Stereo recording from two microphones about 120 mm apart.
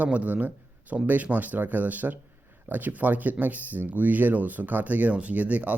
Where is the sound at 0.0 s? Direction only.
10° right (ahead or behind).